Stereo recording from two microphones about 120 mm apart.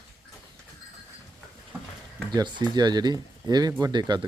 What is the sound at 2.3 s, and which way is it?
Speech, 35° right (ahead or behind).